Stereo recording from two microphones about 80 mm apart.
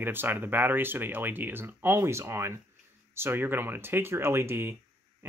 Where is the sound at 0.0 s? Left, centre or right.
Right.